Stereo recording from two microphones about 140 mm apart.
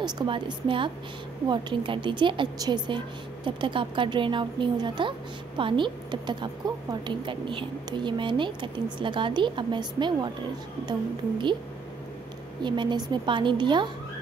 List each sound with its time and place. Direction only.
0.0 s a woman's voice: 35° right (ahead or behind)
12.6 s a woman's voice: 35° right (ahead or behind)